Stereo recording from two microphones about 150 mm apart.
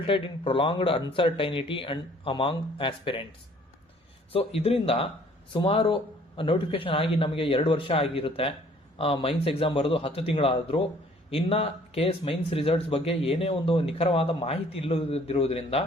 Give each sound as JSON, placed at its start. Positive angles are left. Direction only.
{"t": 0.0, "sound": "speech", "side_deg": 35}
{"t": 4.3, "sound": "speech", "side_deg": 40}